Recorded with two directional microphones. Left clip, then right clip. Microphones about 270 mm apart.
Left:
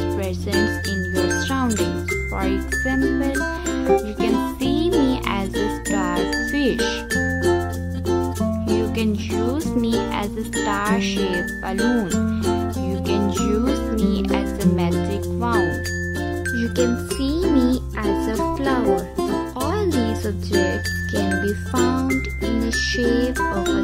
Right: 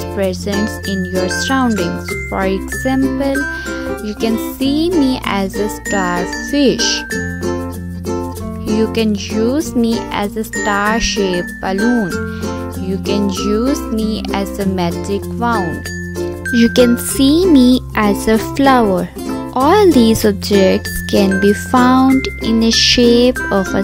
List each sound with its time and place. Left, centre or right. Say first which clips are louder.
1.2 s speech: right 7 dB; right
8.7 s speech: right 10 dB; right